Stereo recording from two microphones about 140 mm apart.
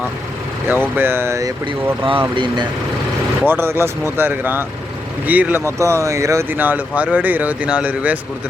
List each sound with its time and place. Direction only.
0.7 s speech: 15° right (ahead or behind)
2.3 s speech: 35° right (ahead or behind)
3.4 s speech: 15° right (ahead or behind)